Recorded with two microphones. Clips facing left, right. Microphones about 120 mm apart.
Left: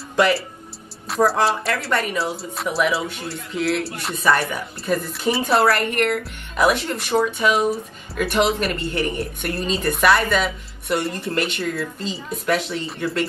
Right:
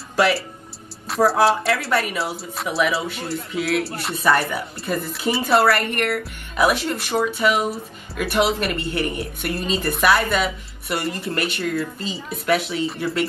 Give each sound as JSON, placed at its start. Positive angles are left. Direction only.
{"t": 0.1, "sound": "music", "side_deg": -5}
{"t": 1.0, "sound": "a woman's voice", "side_deg": 0}